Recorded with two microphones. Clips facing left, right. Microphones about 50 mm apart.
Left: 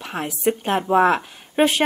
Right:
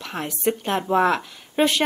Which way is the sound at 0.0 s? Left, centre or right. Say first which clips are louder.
Left 2 dB; centre.